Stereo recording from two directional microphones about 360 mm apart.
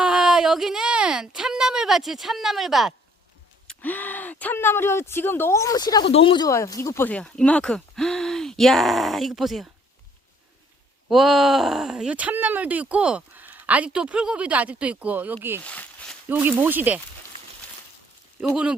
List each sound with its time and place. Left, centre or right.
0.0 s speech: centre
11.1 s speech: centre
18.3 s speech: centre